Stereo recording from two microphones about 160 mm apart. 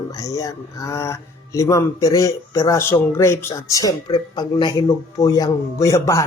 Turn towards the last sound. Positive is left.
turn(degrees=20)  # may be behind; listen again after turning